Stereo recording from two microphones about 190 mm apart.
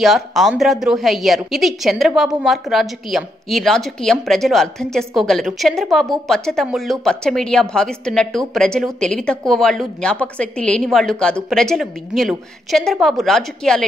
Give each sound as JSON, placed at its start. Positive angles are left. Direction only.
{"t": 0.0, "sound": "a woman's voice", "side_deg": 0}